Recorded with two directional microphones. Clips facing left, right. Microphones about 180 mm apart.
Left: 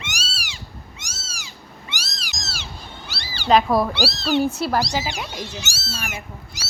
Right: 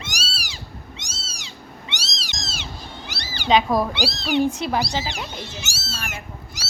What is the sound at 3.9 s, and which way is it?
Speech, 20° right (ahead or behind).